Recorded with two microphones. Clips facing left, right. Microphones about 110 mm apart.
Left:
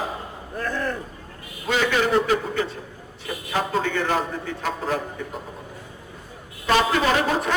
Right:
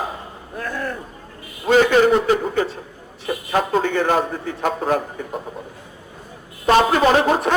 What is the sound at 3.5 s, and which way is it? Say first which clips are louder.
A man's voice: right 5 dB; 45° right (ahead or behind).